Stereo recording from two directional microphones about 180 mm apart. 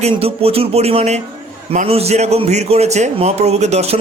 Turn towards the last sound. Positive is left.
turn(degrees=-35)  # may be behind; listen again after turning